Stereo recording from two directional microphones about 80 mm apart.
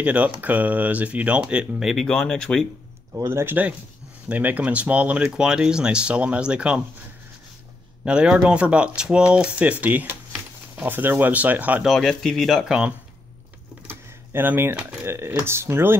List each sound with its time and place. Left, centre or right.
0.0 s speech: centre
1.9 s speech: centre
3.3 s speech: right
4.3 s speech: right
8.0 s speech: centre
11.8 s speech: centre
13.8 s a sound: right
15.0 s speech: right